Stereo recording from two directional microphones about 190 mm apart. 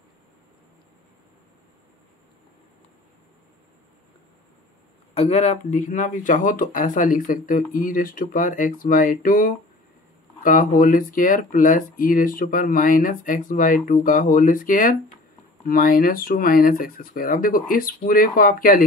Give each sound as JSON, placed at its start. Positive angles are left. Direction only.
{"t": 5.1, "sound": "speech", "side_deg": 35}